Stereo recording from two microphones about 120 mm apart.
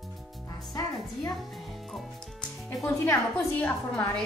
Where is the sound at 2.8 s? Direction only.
20° left (ahead or behind).